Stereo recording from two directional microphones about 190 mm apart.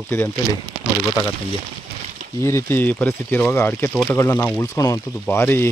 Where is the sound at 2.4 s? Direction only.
15° left (ahead or behind).